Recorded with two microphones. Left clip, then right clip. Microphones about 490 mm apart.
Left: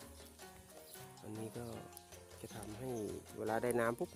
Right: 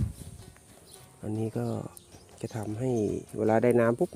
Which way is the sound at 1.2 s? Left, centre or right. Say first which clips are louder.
Right 15 dB; left.